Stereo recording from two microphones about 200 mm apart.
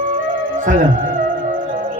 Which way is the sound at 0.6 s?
40° right (ahead or behind).